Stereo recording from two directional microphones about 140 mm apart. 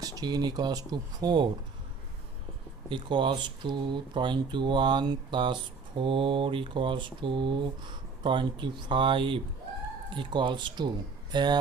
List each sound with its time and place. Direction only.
0.0 s speech: 25° right (ahead or behind)
2.9 s speech: 35° right (ahead or behind)